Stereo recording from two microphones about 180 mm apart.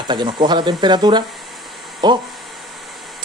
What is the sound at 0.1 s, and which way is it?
Speech, 25° right (ahead or behind).